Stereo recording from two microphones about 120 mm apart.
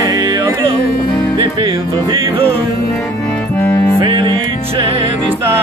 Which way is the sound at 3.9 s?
45° right (ahead or behind).